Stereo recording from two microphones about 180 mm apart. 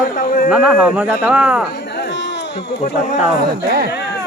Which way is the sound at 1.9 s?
70° left (ahead or behind).